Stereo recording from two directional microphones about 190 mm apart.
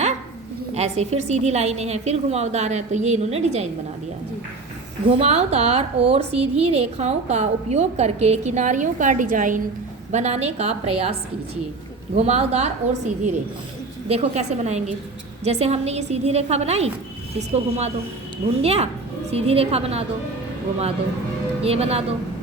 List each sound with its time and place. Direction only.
0.7 s a woman's voice: 35° right (ahead or behind)
5.0 s a woman's voice: 30° right (ahead or behind)
12.1 s a woman's voice: 35° right (ahead or behind)
21.6 s a woman's voice: 30° right (ahead or behind)